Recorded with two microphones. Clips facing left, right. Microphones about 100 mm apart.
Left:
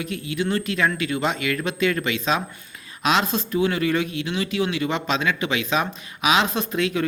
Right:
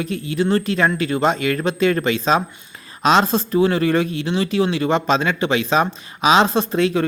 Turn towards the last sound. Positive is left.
turn(degrees=-35)  # may be behind; listen again after turning